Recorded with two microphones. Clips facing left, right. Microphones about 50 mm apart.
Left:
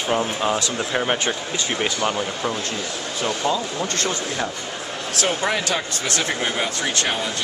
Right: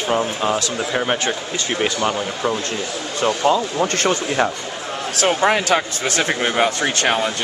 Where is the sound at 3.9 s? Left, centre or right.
Right.